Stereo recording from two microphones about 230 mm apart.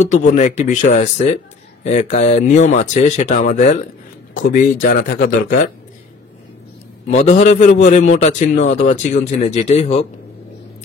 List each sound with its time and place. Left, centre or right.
0.0 s speech: left
7.1 s a man's voice: left